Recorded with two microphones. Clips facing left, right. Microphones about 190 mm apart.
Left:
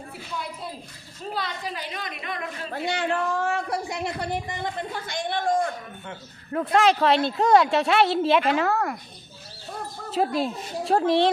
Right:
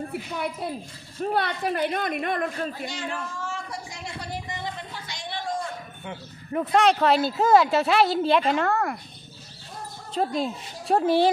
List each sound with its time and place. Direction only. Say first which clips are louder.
0.6 s speech: right 5 dB; 60° right (ahead or behind)
2.7 s a woman's voice: left 6 dB; 65° left (ahead or behind)
6.5 s speech: even; centre (ahead or behind)
10.1 s speech: left 2 dB; 5° left (ahead or behind)